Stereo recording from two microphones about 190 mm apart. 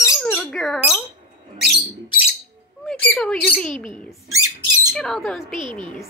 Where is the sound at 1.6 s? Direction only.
60° right (ahead or behind).